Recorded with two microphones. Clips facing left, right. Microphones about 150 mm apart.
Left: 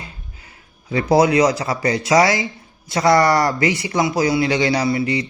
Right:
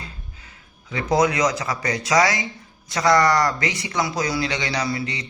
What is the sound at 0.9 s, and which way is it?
A man's voice, 30° left (ahead or behind).